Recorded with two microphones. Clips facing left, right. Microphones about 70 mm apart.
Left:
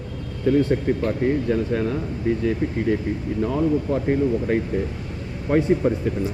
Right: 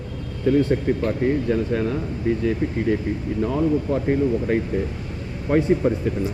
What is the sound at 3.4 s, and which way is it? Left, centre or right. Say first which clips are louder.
A man's voice: even; right.